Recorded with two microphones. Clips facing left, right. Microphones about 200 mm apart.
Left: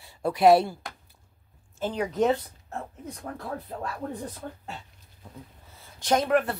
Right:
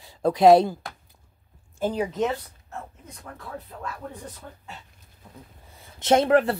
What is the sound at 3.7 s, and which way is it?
Speech, 45° left (ahead or behind).